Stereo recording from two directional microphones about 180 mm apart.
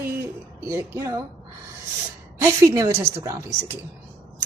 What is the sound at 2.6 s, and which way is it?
Speech, 15° right (ahead or behind).